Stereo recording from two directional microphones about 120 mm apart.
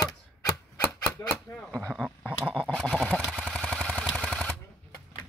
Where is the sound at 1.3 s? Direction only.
5° left (ahead or behind).